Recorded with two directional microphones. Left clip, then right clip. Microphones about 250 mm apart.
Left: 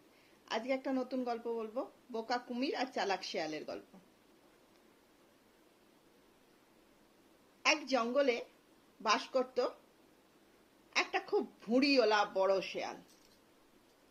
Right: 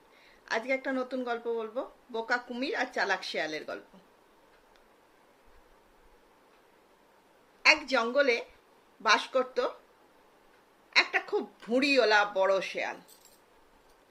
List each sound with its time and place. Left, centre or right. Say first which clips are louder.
0.5 s speech: right 6 dB; centre
7.6 s a woman's voice: right 8 dB; centre
11.3 s speech: even; centre